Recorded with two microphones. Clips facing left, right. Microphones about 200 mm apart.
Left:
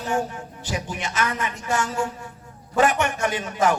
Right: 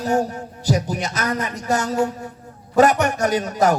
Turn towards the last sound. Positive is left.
turn(degrees=-40)  # may be behind; listen again after turning